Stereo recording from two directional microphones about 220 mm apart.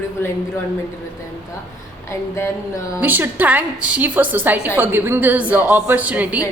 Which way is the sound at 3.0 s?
10° right (ahead or behind).